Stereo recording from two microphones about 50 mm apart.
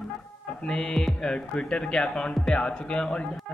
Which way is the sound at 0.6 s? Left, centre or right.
Centre.